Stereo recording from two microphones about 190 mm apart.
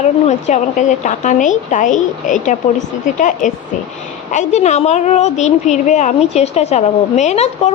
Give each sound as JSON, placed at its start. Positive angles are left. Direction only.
{"t": 0.0, "sound": "a woman's voice", "side_deg": 35}